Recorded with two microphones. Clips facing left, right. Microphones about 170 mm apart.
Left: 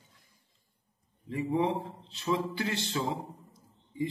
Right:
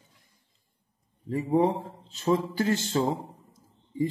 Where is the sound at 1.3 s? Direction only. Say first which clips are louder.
Right 5 dB; 40° right (ahead or behind).